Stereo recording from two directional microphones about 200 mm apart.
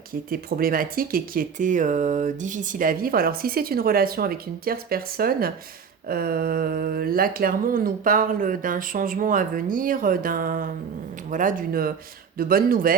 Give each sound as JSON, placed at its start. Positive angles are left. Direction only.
{"t": 0.1, "sound": "speech", "side_deg": -45}